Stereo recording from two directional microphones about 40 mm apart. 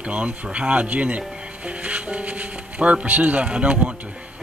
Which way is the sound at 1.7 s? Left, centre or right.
Right.